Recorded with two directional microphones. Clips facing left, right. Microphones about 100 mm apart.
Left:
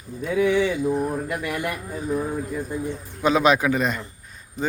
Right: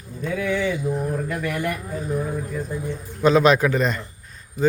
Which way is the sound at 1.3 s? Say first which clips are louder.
Right 1 dB; 15° left (ahead or behind).